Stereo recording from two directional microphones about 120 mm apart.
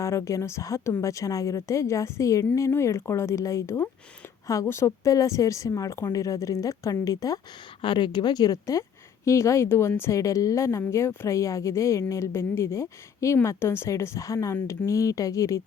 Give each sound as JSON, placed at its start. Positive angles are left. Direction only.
{"t": 0.0, "sound": "speech", "side_deg": 25}
{"t": 7.8, "sound": "speech", "side_deg": 40}